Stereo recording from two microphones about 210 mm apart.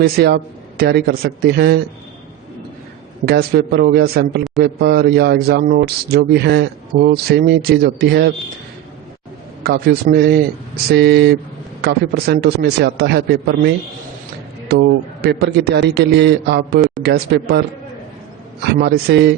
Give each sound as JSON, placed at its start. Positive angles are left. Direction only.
{"t": 0.0, "sound": "speech", "side_deg": -50}
{"t": 3.2, "sound": "speech", "side_deg": -45}
{"t": 9.6, "sound": "speech", "side_deg": -45}
{"t": 18.6, "sound": "speech", "side_deg": -50}